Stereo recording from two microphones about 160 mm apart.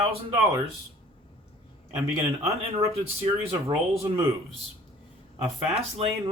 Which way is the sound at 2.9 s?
35° right (ahead or behind).